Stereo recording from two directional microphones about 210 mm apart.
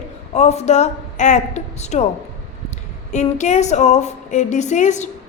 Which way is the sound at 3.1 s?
35° left (ahead or behind).